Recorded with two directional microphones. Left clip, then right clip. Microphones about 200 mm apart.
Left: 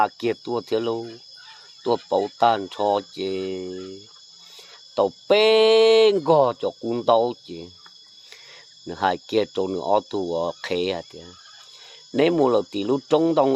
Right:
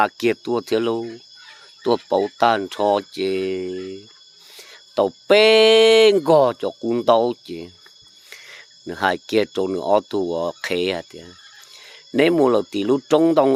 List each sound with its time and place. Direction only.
0.0 s speech: 20° right (ahead or behind)